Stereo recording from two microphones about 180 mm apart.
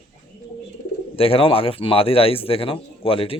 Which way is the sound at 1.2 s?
30° left (ahead or behind).